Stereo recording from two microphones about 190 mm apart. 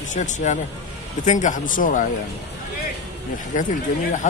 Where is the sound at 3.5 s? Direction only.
40° left (ahead or behind).